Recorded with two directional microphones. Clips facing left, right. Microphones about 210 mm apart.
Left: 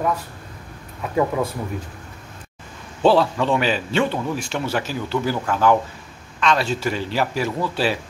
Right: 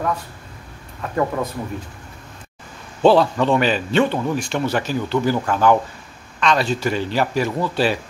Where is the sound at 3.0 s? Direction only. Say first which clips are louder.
Right 2 dB; 5° left (ahead or behind).